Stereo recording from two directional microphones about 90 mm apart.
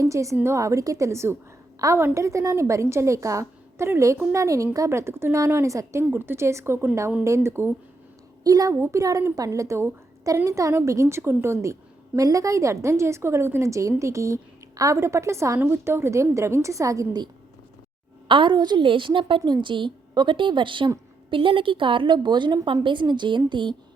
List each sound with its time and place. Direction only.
0.0 s a woman's voice: 35° right (ahead or behind)
6.1 s speech: 25° right (ahead or behind)
8.4 s a woman's voice: 40° right (ahead or behind)
18.3 s a woman's voice: 65° right (ahead or behind)
22.6 s a woman's voice: 70° right (ahead or behind)